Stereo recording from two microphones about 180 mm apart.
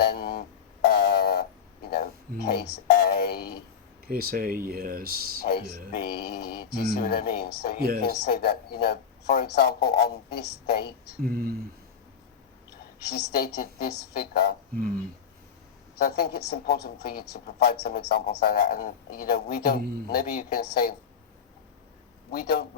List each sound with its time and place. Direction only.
0.0 s a sound: 60° left (ahead or behind)
2.5 s music: 60° left (ahead or behind)
4.0 s speech: 55° right (ahead or behind)
5.4 s speech: 60° left (ahead or behind)
7.8 s speech: 55° right (ahead or behind)
8.0 s speech: 60° left (ahead or behind)
11.2 s speech: 55° right (ahead or behind)
13.1 s speech: 60° left (ahead or behind)
16.0 s speech: 60° left (ahead or behind)
22.3 s speech: 55° left (ahead or behind)